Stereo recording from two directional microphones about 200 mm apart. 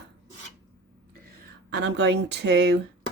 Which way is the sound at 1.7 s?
60° right (ahead or behind).